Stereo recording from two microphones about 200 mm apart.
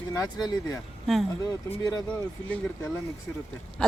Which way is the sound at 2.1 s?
5° left (ahead or behind).